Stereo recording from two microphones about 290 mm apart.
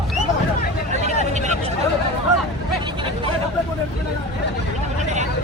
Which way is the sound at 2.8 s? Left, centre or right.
Centre.